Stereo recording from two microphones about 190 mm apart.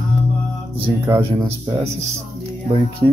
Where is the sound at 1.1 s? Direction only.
30° right (ahead or behind).